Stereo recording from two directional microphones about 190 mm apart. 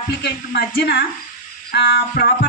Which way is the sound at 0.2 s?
55° left (ahead or behind).